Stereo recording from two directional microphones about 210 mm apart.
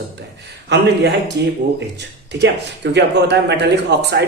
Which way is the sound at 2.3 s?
55° right (ahead or behind).